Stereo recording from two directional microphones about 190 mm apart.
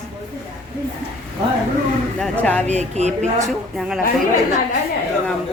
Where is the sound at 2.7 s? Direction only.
35° right (ahead or behind).